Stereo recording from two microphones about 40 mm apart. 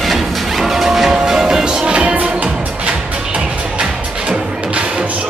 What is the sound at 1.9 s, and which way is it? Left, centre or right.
Music, right.